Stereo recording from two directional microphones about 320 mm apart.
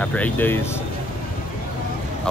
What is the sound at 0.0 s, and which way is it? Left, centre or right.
Speech, centre.